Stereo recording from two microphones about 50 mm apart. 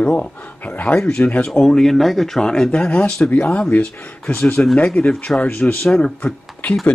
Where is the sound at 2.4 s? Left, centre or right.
Centre.